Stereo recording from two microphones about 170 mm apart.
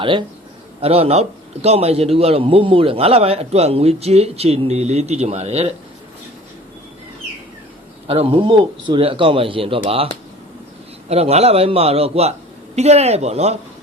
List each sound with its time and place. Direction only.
0.0 s a man's voice: 30° right (ahead or behind)
8.0 s a man's voice: 35° right (ahead or behind)
11.1 s a man's voice: 40° right (ahead or behind)